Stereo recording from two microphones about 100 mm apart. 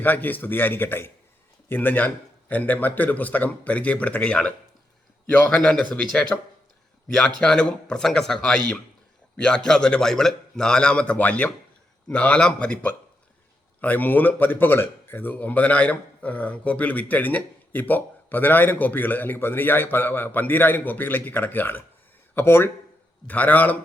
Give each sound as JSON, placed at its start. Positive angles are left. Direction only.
{"t": 0.0, "sound": "speech", "side_deg": 20}